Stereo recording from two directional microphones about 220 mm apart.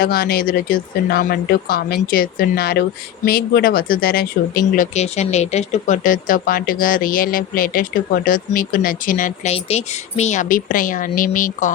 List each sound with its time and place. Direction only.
0.0 s speech: 45° left (ahead or behind)